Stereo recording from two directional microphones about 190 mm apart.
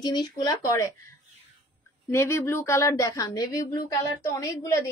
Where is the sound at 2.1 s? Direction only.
15° left (ahead or behind).